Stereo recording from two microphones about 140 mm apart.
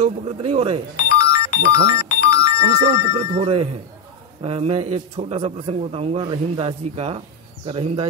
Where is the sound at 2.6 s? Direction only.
50° right (ahead or behind).